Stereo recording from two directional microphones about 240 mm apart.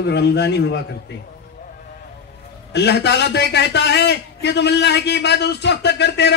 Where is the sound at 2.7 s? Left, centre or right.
Left.